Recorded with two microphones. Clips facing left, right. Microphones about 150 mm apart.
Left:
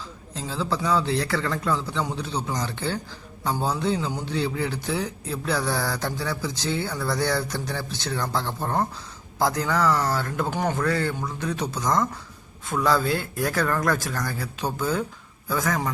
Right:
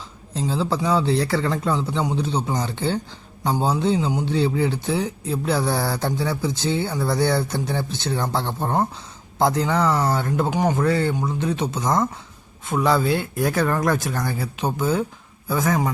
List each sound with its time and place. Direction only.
0.3 s speech: 35° right (ahead or behind)
10.5 s speech: 15° right (ahead or behind)
10.8 s speech: 25° right (ahead or behind)